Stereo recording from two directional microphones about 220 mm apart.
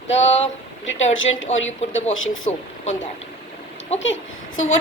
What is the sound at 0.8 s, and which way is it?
A woman's voice, 60° left (ahead or behind).